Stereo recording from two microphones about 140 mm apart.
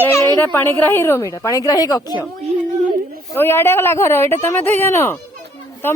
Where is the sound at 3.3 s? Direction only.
15° left (ahead or behind).